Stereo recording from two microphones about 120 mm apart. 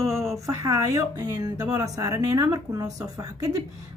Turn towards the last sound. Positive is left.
turn(degrees=-30)  # may be behind; listen again after turning